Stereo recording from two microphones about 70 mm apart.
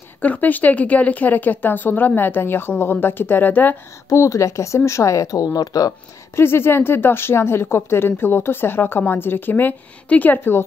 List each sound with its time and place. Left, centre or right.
0.2 s speech: left
4.1 s speech: left
6.3 s speech: left